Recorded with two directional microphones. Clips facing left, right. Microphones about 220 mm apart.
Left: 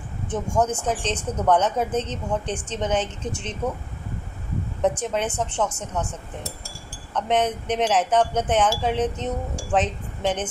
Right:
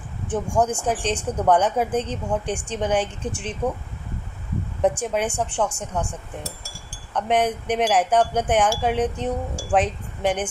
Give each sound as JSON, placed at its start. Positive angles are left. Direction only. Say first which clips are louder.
{"t": 0.5, "sound": "speech", "louder": "right 1 dB", "side_deg": -10}
{"t": 5.0, "sound": "speech", "louder": "right 1 dB", "side_deg": -10}
{"t": 7.2, "sound": "speech", "louder": "right 1 dB", "side_deg": -10}